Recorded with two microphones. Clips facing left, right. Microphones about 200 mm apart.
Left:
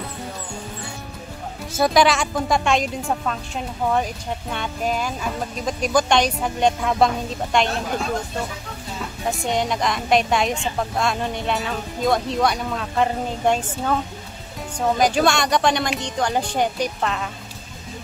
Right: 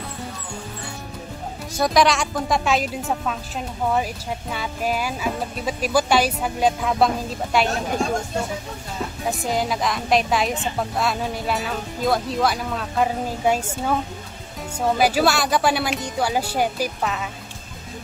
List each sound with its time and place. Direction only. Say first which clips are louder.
1.7 s speech: left 1 dB; centre (ahead or behind)
9.2 s speech: left 1 dB; centre (ahead or behind)